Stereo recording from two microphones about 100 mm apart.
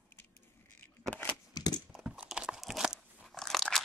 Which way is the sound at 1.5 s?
45° left (ahead or behind).